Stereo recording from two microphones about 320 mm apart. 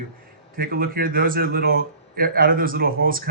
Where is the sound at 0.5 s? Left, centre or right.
Right.